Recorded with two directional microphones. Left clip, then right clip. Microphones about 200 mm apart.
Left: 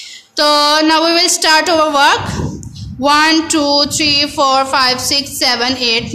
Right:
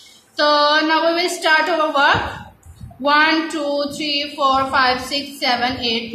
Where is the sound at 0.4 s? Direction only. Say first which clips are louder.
Left 4 dB; 50° left (ahead or behind).